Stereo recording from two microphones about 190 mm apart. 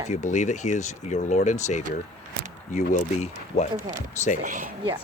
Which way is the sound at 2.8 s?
40° left (ahead or behind).